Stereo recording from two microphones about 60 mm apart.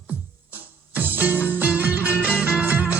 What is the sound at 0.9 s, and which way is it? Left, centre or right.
Music, right.